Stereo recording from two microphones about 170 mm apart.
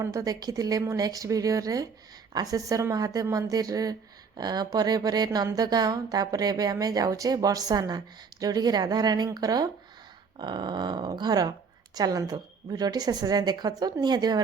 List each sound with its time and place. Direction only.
0.0 s a woman's voice: 20° right (ahead or behind)